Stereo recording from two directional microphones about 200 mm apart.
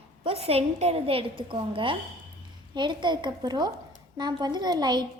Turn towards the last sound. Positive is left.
turn(degrees=-20)  # may be behind; listen again after turning